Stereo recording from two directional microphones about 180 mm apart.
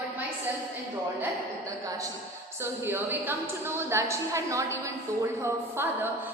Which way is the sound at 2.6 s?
10° right (ahead or behind).